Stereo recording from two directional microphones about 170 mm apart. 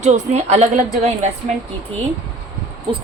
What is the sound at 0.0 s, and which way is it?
Speech, 40° right (ahead or behind).